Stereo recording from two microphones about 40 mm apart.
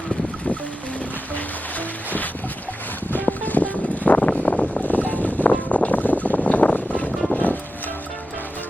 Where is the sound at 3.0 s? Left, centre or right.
Left.